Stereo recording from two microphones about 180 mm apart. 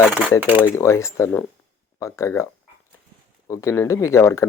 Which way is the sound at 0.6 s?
15° left (ahead or behind).